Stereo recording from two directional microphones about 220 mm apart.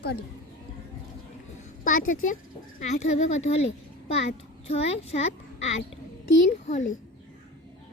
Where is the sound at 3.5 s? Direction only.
30° left (ahead or behind).